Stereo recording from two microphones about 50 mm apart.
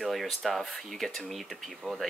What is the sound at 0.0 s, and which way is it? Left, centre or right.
Speech, centre.